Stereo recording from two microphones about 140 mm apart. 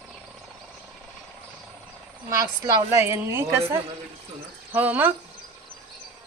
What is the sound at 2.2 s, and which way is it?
A woman's voice, 20° right (ahead or behind).